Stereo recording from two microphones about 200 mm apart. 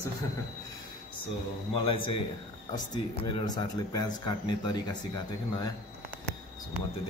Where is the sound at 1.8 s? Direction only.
25° left (ahead or behind).